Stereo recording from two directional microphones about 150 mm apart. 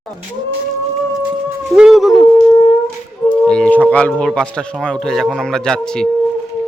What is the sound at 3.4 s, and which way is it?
Speech, 5° left (ahead or behind).